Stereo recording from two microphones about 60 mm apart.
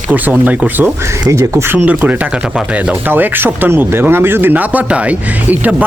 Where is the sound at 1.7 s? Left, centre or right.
Right.